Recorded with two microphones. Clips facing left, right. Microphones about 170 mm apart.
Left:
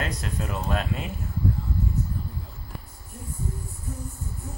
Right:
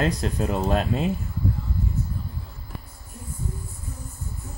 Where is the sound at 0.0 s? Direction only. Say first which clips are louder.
Right 7 dB; 30° right (ahead or behind).